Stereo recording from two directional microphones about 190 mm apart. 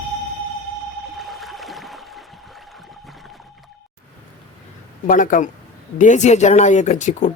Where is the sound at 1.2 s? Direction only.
Centre (ahead or behind).